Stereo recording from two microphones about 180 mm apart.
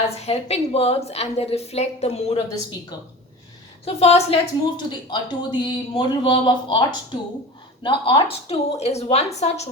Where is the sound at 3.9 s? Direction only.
35° left (ahead or behind).